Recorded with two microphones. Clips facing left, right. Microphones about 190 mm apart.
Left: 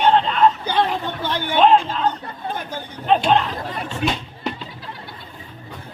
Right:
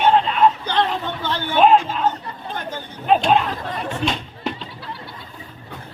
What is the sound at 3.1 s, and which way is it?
Chatter, 5° right (ahead or behind).